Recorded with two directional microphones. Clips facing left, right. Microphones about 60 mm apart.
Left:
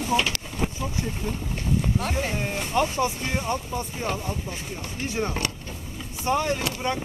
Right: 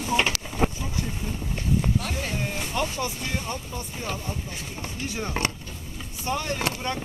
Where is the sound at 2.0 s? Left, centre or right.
Left; by 2.9 s centre.